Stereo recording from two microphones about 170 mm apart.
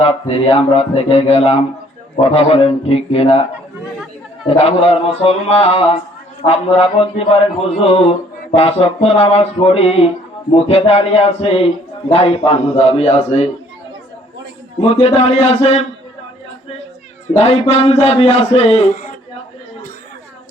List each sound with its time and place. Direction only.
0.0 s a man's voice: 35° left (ahead or behind)
4.4 s a man's voice: 35° left (ahead or behind)
8.5 s a man's voice: 35° left (ahead or behind)
14.8 s a man's voice: 35° left (ahead or behind)
17.3 s a man's voice: 40° left (ahead or behind)